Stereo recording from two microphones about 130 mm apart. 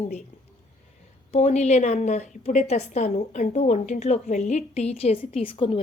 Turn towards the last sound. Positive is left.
turn(degrees=45)  # may be behind; listen again after turning